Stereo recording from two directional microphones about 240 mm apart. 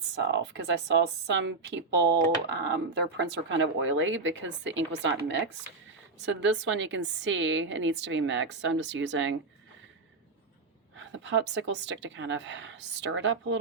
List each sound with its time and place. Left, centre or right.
0.2 s a woman's voice: right
6.2 s a woman's voice: right
10.9 s a woman's voice: right